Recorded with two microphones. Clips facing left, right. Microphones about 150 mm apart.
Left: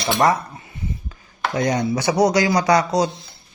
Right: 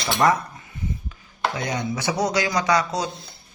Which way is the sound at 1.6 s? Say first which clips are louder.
Left 7 dB; 40° left (ahead or behind).